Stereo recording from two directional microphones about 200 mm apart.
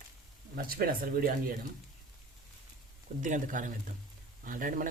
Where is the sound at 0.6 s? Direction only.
50° right (ahead or behind).